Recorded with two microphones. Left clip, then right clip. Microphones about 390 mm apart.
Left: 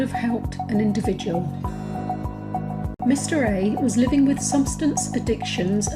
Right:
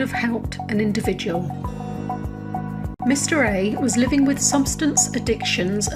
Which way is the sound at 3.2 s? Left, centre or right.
Right.